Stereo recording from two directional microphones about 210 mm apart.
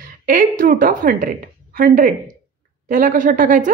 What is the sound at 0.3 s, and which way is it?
Speech, 40° right (ahead or behind).